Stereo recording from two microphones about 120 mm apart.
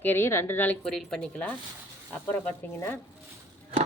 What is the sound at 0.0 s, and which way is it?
Speech, 20° left (ahead or behind).